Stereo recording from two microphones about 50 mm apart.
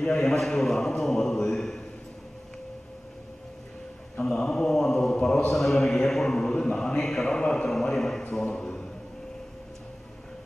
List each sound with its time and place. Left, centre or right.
0.0 s mantra: centre
4.2 s mantra: centre
8.4 s a sound: centre